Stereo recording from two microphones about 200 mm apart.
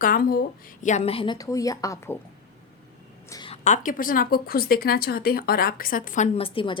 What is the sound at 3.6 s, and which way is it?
Speech, 40° left (ahead or behind).